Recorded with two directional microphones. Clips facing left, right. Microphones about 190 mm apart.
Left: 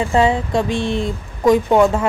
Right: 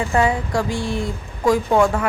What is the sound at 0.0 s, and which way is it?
Speech, 25° left (ahead or behind).